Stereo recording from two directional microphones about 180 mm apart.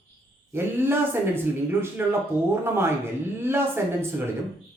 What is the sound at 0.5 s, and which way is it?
Speech, 15° right (ahead or behind).